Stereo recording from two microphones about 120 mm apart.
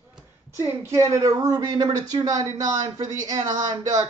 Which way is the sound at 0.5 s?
25° right (ahead or behind).